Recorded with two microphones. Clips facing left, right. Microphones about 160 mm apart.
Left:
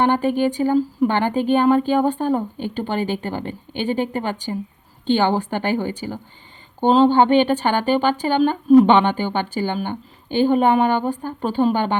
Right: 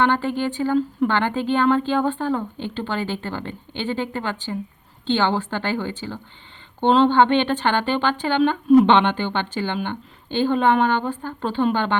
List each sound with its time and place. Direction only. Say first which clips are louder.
0.0 s speech: left 3 dB; 15° left (ahead or behind)